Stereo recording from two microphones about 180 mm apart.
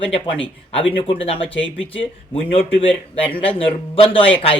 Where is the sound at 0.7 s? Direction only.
30° left (ahead or behind).